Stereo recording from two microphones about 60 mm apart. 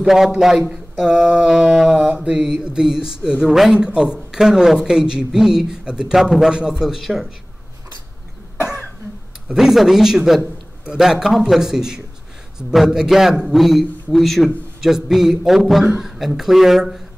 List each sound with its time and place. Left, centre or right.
0.0 s a man's voice: centre
8.6 s cough: left
9.5 s a man's voice: centre